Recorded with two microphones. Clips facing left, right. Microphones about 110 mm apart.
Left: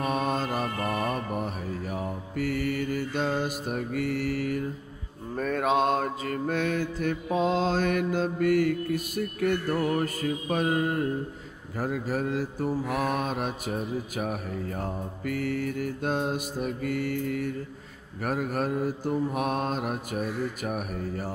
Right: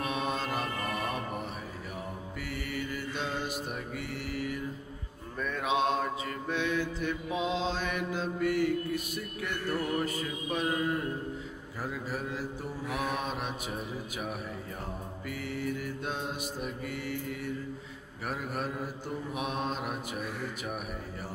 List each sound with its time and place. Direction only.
0.0 s mantra: 45° left (ahead or behind)